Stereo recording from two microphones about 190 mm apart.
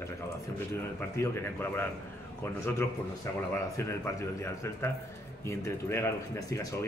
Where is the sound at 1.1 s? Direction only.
15° left (ahead or behind).